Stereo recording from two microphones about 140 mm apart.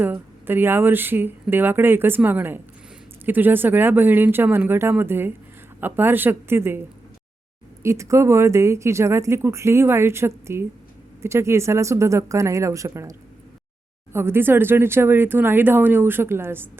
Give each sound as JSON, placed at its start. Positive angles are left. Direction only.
{"t": 0.0, "sound": "speech", "side_deg": -15}